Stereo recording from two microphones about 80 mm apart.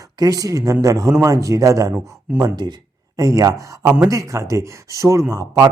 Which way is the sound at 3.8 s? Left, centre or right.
Centre.